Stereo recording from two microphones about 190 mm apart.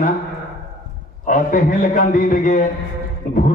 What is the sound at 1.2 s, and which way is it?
Speech, 45° left (ahead or behind).